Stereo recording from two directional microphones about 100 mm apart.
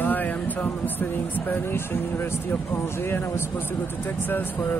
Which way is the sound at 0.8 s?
20° left (ahead or behind).